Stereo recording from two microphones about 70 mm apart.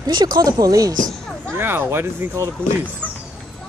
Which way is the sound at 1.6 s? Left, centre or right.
Right.